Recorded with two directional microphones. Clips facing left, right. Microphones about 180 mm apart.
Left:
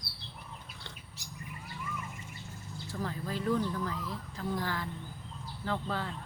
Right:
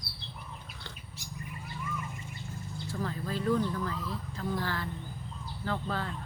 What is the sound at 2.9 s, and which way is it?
Speech, 15° left (ahead or behind).